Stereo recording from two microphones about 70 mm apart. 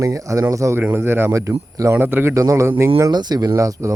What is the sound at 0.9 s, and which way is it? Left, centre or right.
Speech, right.